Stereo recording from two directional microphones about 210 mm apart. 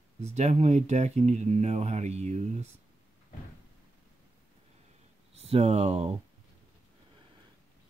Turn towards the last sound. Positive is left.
turn(degrees=-30)  # may be behind; listen again after turning